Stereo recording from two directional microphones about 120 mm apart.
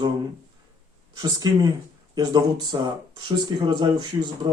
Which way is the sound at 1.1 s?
30° right (ahead or behind).